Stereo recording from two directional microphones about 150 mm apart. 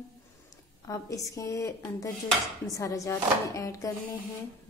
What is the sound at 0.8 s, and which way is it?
A woman's voice, 20° left (ahead or behind).